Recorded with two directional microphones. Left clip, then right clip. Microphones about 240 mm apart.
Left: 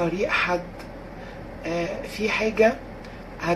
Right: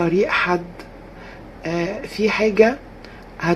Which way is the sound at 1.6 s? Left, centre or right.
Right.